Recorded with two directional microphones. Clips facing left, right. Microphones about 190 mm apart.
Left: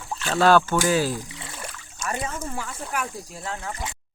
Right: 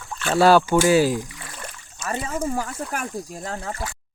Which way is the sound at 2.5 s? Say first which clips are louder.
Right 3 dB; 40° right (ahead or behind).